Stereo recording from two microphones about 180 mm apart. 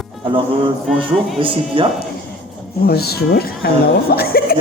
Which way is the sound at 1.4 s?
30° right (ahead or behind).